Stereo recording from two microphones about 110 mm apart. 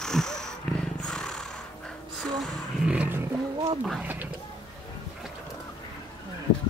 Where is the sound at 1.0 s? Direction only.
5° left (ahead or behind).